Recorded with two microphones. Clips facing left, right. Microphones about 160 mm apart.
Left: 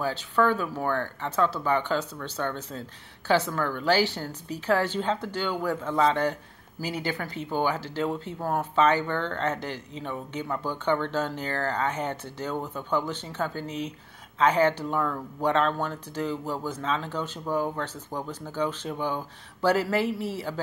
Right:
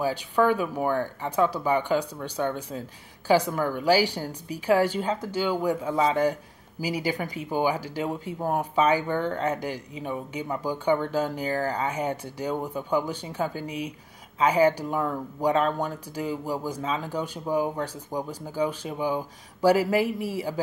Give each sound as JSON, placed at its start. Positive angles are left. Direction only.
{"t": 0.0, "sound": "speech", "side_deg": -10}